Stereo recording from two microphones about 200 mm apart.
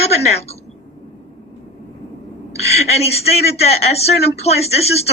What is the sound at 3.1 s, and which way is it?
A woman's voice, 30° left (ahead or behind).